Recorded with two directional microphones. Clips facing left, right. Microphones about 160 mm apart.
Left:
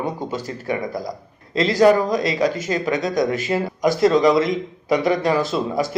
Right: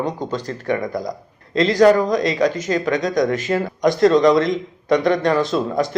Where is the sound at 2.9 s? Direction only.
5° left (ahead or behind).